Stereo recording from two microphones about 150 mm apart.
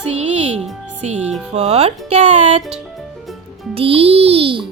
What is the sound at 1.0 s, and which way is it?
A child's voice, 45° right (ahead or behind).